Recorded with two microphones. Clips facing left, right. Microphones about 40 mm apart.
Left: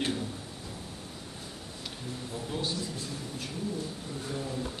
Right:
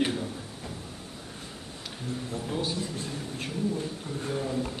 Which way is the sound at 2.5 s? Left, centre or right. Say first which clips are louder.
Right 2 dB; centre.